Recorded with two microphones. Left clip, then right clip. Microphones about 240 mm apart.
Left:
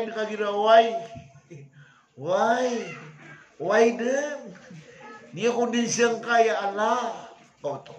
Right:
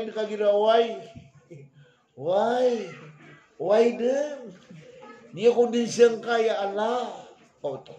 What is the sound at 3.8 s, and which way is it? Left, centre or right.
Speech, centre.